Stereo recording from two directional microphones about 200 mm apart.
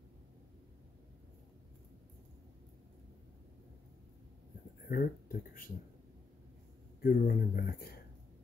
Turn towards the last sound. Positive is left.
turn(degrees=50)  # may be behind; listen again after turning